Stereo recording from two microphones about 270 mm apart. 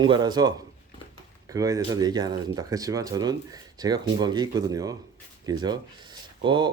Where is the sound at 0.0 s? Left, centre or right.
Centre.